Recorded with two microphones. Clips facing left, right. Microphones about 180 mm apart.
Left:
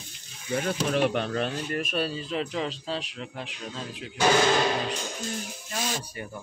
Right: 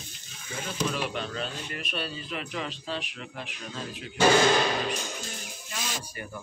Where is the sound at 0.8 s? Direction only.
55° left (ahead or behind); by 3.5 s 30° left (ahead or behind).